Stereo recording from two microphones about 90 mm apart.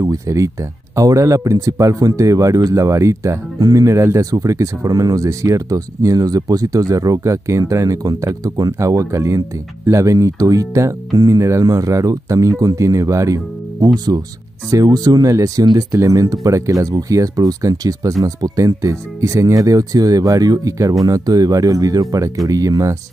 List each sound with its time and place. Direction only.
0.0 s speech: 40° right (ahead or behind)